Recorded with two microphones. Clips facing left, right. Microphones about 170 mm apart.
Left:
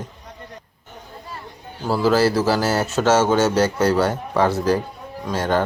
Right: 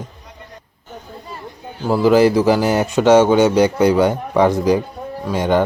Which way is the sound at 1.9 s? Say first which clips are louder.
Right 5 dB; 15° right (ahead or behind).